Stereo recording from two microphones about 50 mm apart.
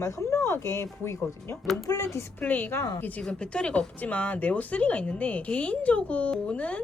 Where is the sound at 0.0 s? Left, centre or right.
Left.